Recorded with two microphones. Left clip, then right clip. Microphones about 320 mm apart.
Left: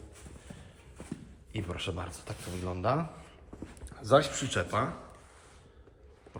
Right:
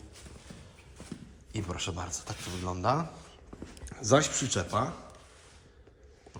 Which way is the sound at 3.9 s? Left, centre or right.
Right.